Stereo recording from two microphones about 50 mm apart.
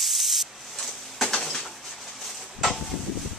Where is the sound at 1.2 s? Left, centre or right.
Centre.